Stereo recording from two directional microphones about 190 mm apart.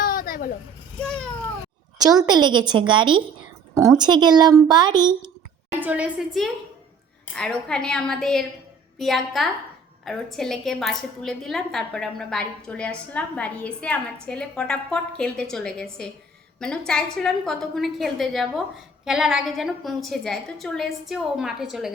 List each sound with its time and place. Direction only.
0.0 s vehicle: 50° left (ahead or behind)
1.0 s a woman's voice: 5° left (ahead or behind)
2.2 s a child's voice: 20° right (ahead or behind)
5.8 s a woman's voice: 5° right (ahead or behind)